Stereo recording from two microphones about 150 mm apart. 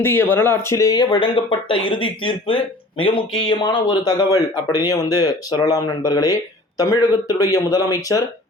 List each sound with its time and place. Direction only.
0.0 s speech: 15° left (ahead or behind)